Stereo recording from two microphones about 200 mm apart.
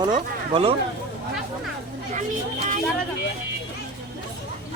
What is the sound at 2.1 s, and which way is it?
Speech, 40° right (ahead or behind).